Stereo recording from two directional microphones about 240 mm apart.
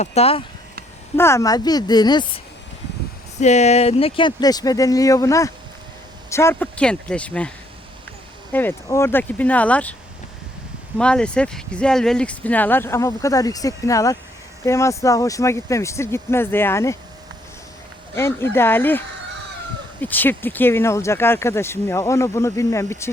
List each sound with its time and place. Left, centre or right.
0.0 s speech: left
1.1 s speech: centre
3.4 s speech: left; by 7.5 s centre
8.5 s speech: centre
10.9 s speech: centre
18.1 s speech: centre